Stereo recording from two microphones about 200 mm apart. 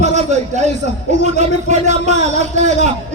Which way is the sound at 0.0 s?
35° right (ahead or behind).